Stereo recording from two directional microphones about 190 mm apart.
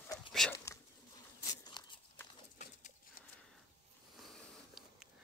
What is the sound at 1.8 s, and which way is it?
Walk, 25° left (ahead or behind).